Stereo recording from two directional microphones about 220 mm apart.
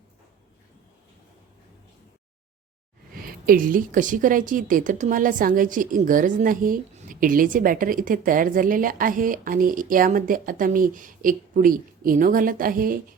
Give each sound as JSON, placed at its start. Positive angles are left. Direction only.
{"t": 3.2, "sound": "a woman's voice", "side_deg": -40}